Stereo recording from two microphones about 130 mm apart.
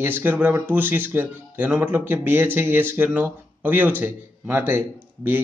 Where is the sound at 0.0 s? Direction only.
15° right (ahead or behind).